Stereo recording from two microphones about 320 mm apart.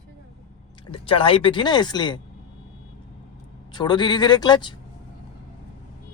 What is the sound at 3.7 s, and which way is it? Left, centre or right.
Speech, centre.